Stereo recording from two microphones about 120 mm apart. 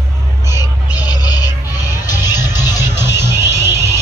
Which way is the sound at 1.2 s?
35° left (ahead or behind).